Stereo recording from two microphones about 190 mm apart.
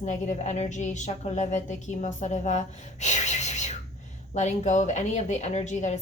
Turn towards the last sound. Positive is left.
turn(degrees=40)  # may be behind; listen again after turning